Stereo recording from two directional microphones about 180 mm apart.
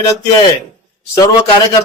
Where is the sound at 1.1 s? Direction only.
20° left (ahead or behind).